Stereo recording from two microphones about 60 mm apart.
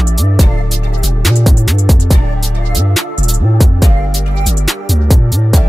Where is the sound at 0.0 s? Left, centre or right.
Centre.